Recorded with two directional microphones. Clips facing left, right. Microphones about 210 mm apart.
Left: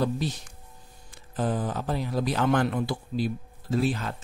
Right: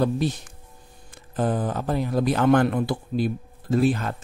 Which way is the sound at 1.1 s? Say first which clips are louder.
Right 4 dB; 55° right (ahead or behind).